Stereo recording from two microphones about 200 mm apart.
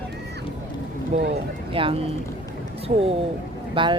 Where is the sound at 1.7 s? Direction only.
25° right (ahead or behind).